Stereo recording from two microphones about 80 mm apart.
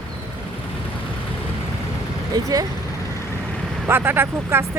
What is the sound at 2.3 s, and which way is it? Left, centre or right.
Speech, right.